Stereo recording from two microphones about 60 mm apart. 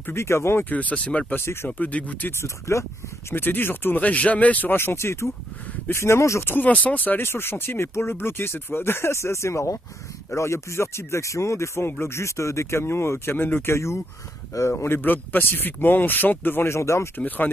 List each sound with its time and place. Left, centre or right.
0.1 s speech: left
0.7 s speech: left
1.3 s speech: left
1.7 s speech: left
2.3 s speech: left
3.3 s speech: left
4.0 s speech: left
4.7 s speech: left
6.4 s speech: left
13.7 s speech: left
16.7 s speech: left